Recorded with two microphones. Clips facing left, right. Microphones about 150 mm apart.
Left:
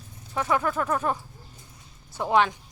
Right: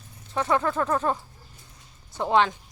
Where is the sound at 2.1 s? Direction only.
20° right (ahead or behind).